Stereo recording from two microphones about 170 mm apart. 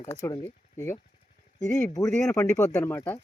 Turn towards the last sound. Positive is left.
turn(degrees=15)  # may be behind; listen again after turning